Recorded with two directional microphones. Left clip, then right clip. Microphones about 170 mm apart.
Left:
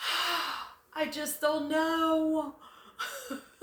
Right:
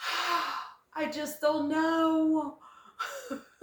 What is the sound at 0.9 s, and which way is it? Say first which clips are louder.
Speech: even; 15° left (ahead or behind).